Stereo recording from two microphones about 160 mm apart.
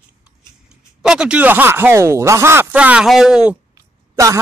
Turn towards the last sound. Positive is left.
turn(degrees=-20)  # may be behind; listen again after turning